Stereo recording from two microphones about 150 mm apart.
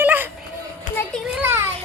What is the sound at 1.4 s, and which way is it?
Children playing, 15° right (ahead or behind).